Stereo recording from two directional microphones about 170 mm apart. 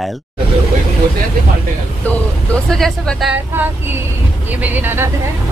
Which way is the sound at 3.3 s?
10° right (ahead or behind).